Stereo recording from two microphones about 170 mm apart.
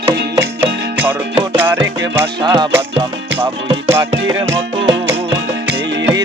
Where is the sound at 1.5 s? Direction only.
15° right (ahead or behind).